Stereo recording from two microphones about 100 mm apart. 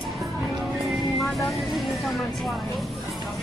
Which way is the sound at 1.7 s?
Centre (ahead or behind).